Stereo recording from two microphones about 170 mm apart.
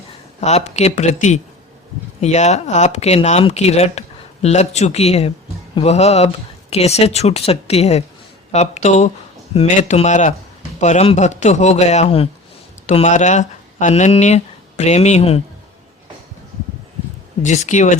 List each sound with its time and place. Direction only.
0.3 s speech: 40° left (ahead or behind)
12.9 s speech: 45° left (ahead or behind)
17.4 s speech: 45° left (ahead or behind)